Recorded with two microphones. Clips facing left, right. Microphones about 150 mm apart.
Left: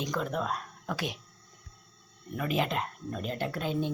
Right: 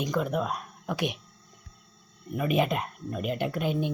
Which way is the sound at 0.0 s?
10° right (ahead or behind).